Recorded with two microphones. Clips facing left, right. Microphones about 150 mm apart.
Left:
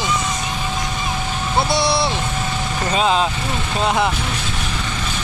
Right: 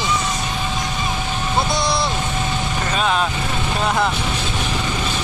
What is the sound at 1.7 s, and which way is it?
Speech, 5° left (ahead or behind).